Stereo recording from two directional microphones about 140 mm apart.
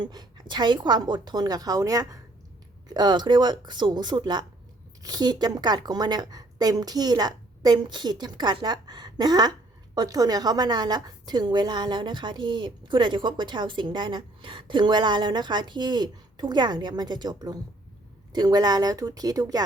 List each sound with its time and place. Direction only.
0.0 s a woman's voice: 30° right (ahead or behind)